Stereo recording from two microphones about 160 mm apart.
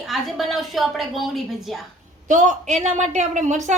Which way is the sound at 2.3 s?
50° right (ahead or behind).